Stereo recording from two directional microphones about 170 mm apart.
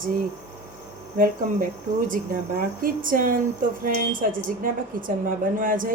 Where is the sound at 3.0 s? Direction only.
55° right (ahead or behind).